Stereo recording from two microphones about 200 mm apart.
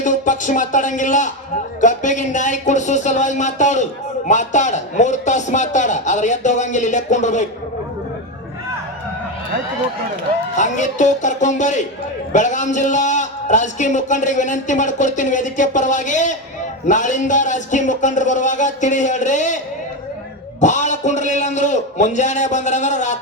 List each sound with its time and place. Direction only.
0.0 s a man's voice: 40° left (ahead or behind)
10.5 s a man's voice: 35° left (ahead or behind)
20.6 s a man's voice: 40° left (ahead or behind)